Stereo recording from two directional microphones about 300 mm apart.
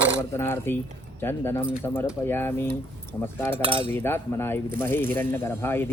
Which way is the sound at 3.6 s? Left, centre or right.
Centre.